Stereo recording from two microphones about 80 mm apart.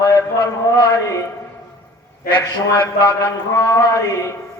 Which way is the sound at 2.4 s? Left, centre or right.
Left.